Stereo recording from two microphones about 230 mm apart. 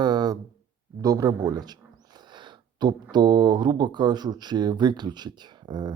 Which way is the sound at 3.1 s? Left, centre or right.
Centre.